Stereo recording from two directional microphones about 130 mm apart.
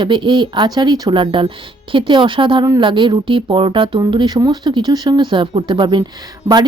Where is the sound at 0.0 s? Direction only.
35° right (ahead or behind).